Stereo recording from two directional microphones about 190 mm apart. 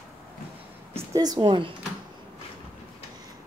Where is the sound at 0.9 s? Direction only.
20° right (ahead or behind).